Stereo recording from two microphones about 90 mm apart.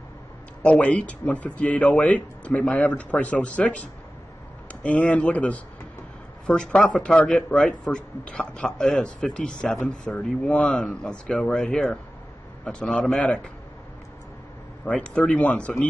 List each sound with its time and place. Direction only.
0.6 s a man's voice: 15° left (ahead or behind)
14.9 s a man's voice: 15° left (ahead or behind)